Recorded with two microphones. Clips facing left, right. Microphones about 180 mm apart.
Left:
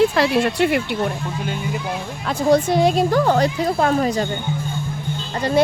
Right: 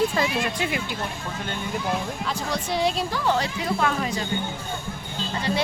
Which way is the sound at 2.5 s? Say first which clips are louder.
Left 11 dB; 50° left (ahead or behind).